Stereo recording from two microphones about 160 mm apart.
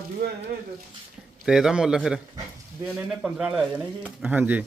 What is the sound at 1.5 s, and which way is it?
Speech, 5° right (ahead or behind).